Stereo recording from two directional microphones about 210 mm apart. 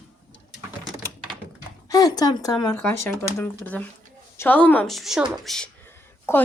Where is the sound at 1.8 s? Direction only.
15° left (ahead or behind).